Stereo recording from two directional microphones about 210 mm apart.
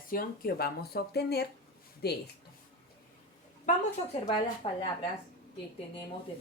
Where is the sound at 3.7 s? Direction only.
40° left (ahead or behind).